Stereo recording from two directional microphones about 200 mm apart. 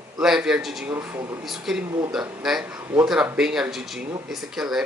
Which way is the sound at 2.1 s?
Centre (ahead or behind).